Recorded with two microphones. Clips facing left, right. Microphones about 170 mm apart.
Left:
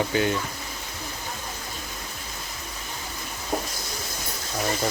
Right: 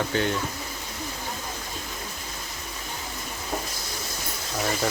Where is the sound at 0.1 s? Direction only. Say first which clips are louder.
Left 2 dB; 10° left (ahead or behind).